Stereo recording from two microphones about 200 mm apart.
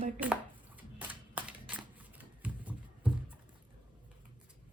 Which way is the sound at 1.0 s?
10° right (ahead or behind).